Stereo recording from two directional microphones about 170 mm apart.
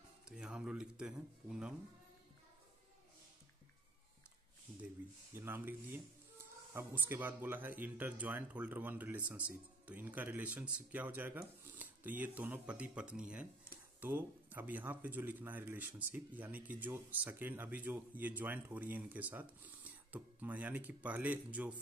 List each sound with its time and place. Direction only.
0.3 s speech: 5° right (ahead or behind)
5.3 s speech: 15° right (ahead or behind)